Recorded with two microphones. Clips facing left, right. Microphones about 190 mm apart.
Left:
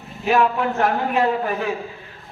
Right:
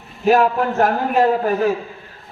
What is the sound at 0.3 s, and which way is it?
A man's voice, 45° right (ahead or behind).